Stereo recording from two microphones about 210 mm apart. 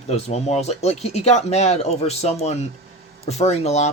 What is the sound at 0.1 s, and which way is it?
Speech, 30° left (ahead or behind).